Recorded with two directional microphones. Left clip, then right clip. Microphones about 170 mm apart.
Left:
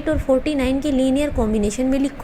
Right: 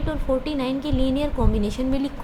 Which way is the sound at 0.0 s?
25° left (ahead or behind).